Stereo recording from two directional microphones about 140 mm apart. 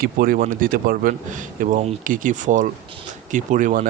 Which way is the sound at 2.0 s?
70° right (ahead or behind).